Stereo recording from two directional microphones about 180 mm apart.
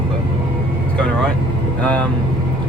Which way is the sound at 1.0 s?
5° left (ahead or behind).